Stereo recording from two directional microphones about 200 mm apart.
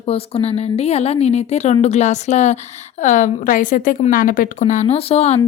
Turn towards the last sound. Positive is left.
turn(degrees=30)  # may be behind; listen again after turning